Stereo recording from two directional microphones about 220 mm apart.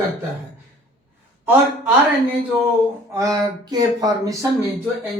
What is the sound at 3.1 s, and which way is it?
Speech, 15° right (ahead or behind).